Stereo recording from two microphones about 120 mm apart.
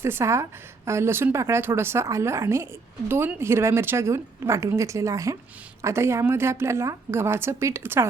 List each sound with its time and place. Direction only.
0.0 s a woman's voice: 20° right (ahead or behind)